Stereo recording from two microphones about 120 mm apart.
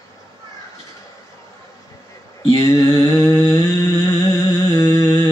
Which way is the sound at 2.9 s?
30° left (ahead or behind).